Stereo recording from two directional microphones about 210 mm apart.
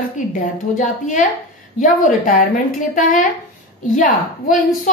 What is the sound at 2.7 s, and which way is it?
A woman's voice, 40° left (ahead or behind).